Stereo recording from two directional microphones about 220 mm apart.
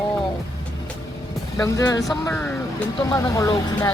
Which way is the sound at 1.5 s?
15° left (ahead or behind).